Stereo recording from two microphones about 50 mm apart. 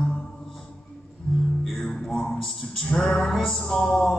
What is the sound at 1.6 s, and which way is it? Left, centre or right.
Music, centre.